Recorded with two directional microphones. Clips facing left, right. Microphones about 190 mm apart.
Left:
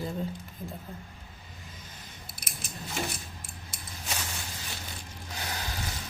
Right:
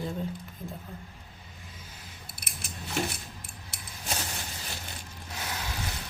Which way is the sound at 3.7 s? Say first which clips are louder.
Even; 65° right (ahead or behind).